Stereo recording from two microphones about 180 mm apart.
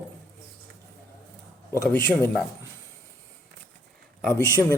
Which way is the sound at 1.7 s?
15° left (ahead or behind).